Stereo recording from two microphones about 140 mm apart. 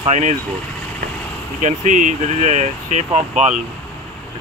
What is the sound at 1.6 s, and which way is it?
Speech, 60° right (ahead or behind).